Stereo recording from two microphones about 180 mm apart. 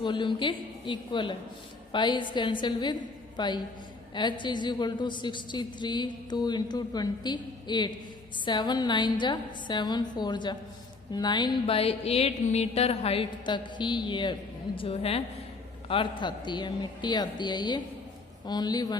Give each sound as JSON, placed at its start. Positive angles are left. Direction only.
{"t": 0.0, "sound": "a woman's voice", "side_deg": 25}